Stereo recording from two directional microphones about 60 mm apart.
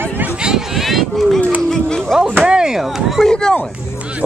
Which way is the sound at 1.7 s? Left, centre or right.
Centre.